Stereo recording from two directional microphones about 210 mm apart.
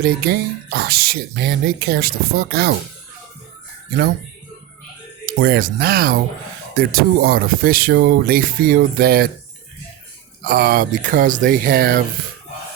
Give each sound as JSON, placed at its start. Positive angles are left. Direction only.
{"t": 0.0, "sound": "speech", "side_deg": -45}
{"t": 5.2, "sound": "speech", "side_deg": -45}
{"t": 10.4, "sound": "speech", "side_deg": -45}